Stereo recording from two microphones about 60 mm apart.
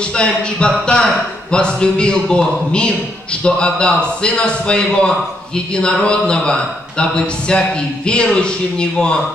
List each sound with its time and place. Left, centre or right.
0.1 s a man's voice: centre
3.4 s a man's voice: centre